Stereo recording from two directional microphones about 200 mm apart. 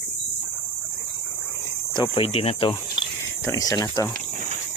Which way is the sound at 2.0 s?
25° left (ahead or behind).